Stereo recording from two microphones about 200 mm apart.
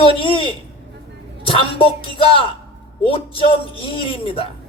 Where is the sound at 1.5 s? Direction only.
25° left (ahead or behind).